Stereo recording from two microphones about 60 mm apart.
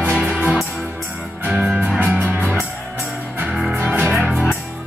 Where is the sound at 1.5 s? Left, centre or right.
Centre.